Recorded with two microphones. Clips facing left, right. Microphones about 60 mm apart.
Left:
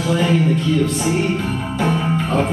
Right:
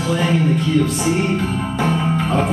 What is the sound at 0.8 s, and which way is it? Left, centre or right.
Speech, centre.